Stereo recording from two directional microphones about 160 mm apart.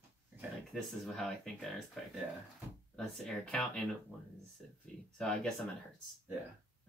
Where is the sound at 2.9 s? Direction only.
5° left (ahead or behind).